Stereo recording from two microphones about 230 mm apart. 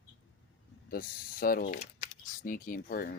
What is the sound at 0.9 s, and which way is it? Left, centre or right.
Speech, left.